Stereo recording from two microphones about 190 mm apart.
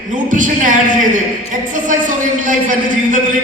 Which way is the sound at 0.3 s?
45° right (ahead or behind).